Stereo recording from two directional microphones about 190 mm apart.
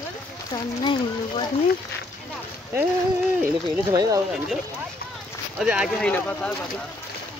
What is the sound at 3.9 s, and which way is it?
Speech, 20° right (ahead or behind).